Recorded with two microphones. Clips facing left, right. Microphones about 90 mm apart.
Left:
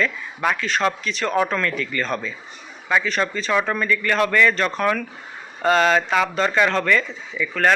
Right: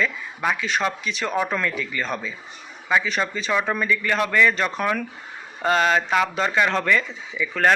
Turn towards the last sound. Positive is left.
turn(degrees=-15)  # may be behind; listen again after turning